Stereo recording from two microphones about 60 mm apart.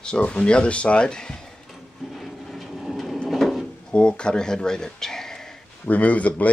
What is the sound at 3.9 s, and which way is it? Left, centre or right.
Speech, centre.